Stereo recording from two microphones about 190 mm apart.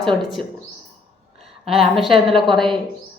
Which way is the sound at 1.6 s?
30° right (ahead or behind).